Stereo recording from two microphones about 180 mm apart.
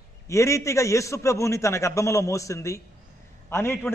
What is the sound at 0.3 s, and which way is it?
A man's voice, 15° left (ahead or behind).